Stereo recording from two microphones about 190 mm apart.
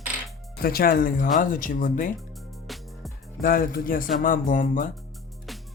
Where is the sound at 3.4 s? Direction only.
50° left (ahead or behind).